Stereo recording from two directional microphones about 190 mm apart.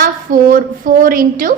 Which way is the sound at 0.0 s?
45° right (ahead or behind).